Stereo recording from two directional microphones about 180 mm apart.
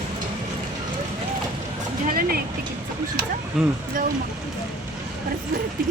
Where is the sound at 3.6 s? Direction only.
5° right (ahead or behind).